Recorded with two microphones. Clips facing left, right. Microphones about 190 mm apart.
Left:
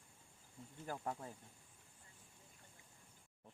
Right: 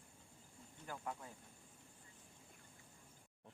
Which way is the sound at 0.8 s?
40° left (ahead or behind).